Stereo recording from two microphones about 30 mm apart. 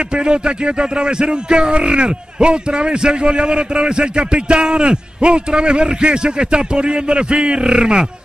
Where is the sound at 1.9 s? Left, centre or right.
Right.